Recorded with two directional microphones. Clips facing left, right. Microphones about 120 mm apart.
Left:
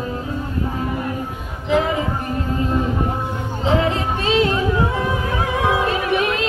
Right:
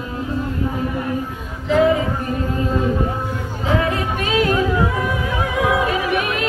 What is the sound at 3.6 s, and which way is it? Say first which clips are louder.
Music: left 1 dB; 25° left (ahead or behind).